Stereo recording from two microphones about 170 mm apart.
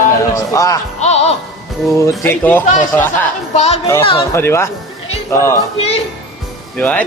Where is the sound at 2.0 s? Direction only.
15° left (ahead or behind).